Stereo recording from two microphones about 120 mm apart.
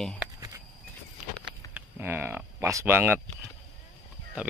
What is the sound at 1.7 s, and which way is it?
Speech, 15° right (ahead or behind).